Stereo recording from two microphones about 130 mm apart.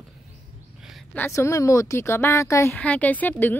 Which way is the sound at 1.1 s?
20° left (ahead or behind).